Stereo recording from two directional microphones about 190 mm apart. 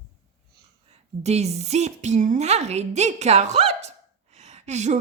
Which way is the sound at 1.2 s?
35° right (ahead or behind).